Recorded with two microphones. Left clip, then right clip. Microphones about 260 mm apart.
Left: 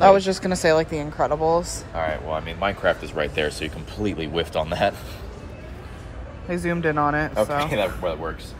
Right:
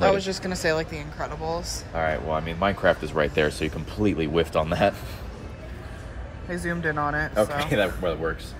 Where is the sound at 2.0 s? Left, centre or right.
Right.